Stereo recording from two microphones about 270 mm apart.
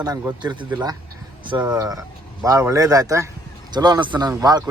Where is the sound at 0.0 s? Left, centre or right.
Centre.